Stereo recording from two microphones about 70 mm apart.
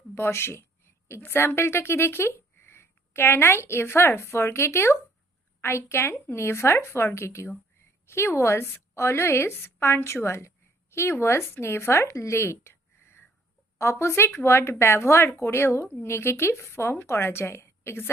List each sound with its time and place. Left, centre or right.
0.1 s a woman's voice: left